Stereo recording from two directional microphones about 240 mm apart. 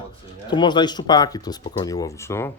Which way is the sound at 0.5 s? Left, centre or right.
Centre.